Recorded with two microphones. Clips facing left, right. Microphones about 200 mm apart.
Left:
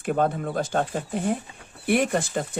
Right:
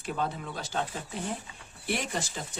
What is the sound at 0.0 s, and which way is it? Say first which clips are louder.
Speech: left 9 dB; 55° left (ahead or behind).